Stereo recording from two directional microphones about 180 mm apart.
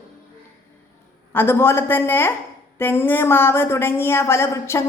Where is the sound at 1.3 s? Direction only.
10° left (ahead or behind).